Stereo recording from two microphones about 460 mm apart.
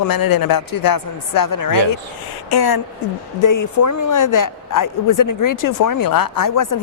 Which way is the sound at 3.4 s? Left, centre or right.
Left.